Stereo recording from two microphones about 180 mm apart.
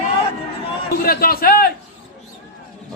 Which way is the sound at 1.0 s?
55° left (ahead or behind).